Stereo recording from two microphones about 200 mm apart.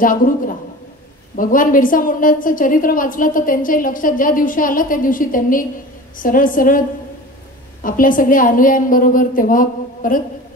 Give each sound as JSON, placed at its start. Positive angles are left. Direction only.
{"t": 0.0, "sound": "a woman's voice", "side_deg": 45}
{"t": 7.8, "sound": "a woman's voice", "side_deg": 45}